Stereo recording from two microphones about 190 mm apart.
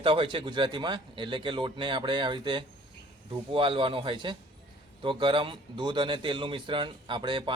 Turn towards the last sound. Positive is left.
turn(degrees=-25)  # may be behind; listen again after turning